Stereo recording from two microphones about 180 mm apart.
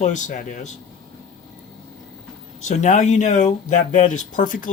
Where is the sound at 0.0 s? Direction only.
45° left (ahead or behind).